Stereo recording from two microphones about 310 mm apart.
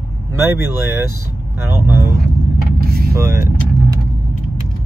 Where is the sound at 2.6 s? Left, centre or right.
Right.